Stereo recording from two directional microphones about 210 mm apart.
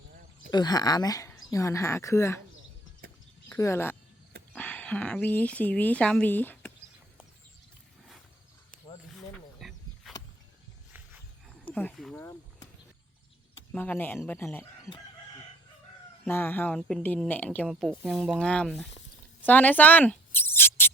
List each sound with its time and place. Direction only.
0.5 s a woman's voice: 20° left (ahead or behind)
3.5 s a woman's voice: 10° left (ahead or behind)
9.0 s wild animals: centre (ahead or behind)
11.6 s wild animals: 5° left (ahead or behind)
12.2 s a sound: 20° left (ahead or behind)
13.7 s a woman's voice: 10° left (ahead or behind)
16.2 s a woman's voice: 10° left (ahead or behind)
19.5 s a sound: 10° left (ahead or behind)